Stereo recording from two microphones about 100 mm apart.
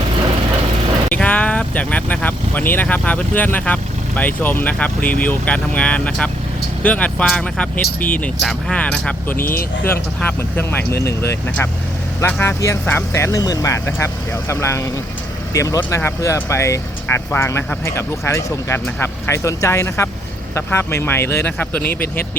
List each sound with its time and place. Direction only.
1.1 s speech: 15° left (ahead or behind)